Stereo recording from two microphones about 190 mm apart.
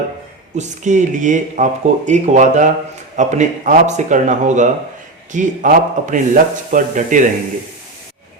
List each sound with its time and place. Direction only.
0.5 s a man's voice: 40° right (ahead or behind)